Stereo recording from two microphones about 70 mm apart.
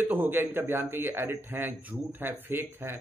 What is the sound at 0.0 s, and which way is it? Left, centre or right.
A man's voice, right.